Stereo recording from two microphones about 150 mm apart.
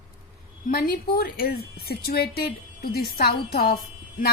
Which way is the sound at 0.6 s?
70° left (ahead or behind).